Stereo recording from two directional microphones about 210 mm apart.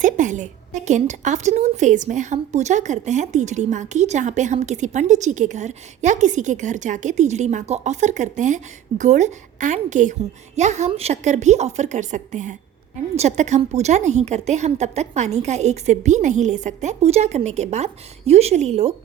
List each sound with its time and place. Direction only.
0.0 s a woman's voice: 35° right (ahead or behind)